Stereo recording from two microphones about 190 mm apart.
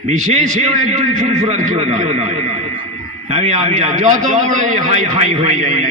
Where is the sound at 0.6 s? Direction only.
35° right (ahead or behind).